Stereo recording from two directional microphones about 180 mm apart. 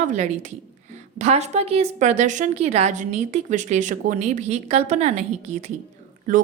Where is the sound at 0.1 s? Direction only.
40° right (ahead or behind).